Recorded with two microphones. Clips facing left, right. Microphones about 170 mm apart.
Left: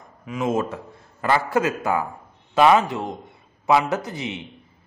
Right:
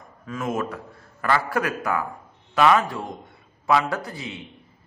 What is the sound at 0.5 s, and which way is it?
A man's voice, 25° left (ahead or behind).